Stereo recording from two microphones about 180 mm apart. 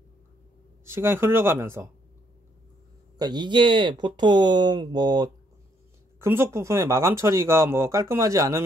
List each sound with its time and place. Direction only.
0.8 s speech: 15° right (ahead or behind)
3.2 s speech: 25° right (ahead or behind)